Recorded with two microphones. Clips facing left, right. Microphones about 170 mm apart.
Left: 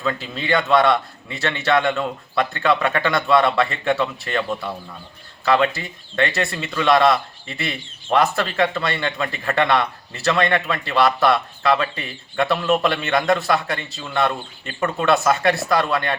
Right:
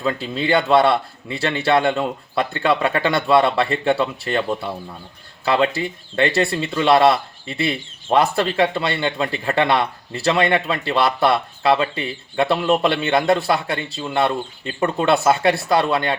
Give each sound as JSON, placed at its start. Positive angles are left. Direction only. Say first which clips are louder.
{"t": 0.0, "sound": "a man's voice", "louder": "right 3 dB", "side_deg": -30}